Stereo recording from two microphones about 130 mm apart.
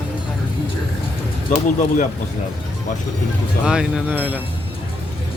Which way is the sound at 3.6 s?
5° right (ahead or behind).